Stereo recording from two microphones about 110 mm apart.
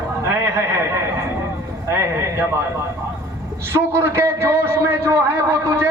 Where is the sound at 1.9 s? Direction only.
25° right (ahead or behind).